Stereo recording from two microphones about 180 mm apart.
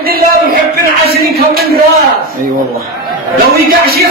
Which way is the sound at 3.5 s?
55° right (ahead or behind).